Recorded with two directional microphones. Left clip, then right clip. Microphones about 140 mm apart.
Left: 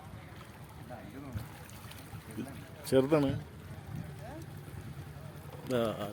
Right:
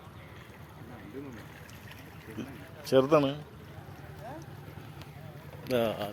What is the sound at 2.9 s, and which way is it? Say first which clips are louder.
Speech: right 4 dB; 20° left (ahead or behind).